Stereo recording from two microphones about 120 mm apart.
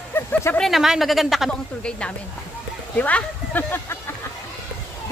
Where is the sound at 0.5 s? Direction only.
Centre (ahead or behind); by 4.0 s 15° left (ahead or behind).